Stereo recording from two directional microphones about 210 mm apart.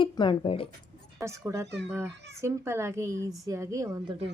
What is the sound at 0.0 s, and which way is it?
Speech, 20° left (ahead or behind).